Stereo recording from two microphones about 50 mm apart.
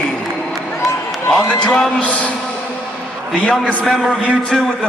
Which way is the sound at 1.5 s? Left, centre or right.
Left.